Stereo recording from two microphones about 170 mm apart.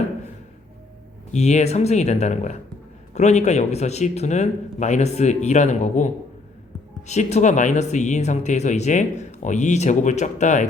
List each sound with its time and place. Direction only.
1.3 s speech: 40° left (ahead or behind)
7.1 s speech: 40° left (ahead or behind)